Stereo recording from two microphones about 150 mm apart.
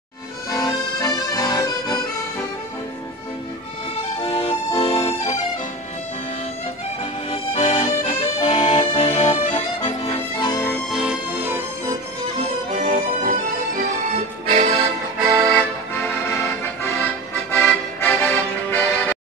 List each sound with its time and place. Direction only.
0.5 s accordion: 25° left (ahead or behind)
4.2 s music: 40° left (ahead or behind)
7.2 s accordion: 45° left (ahead or behind)
9.2 s accordion: 25° left (ahead or behind)
9.8 s accordion: 35° left (ahead or behind)
10.5 s music: 15° left (ahead or behind)
10.9 s music: 5° right (ahead or behind)
11.4 s music: 15° right (ahead or behind)
12.8 s music: 60° right (ahead or behind)
14.1 s music: 50° right (ahead or behind)
15.2 s accordion: 25° right (ahead or behind)
16.9 s music: 15° left (ahead or behind)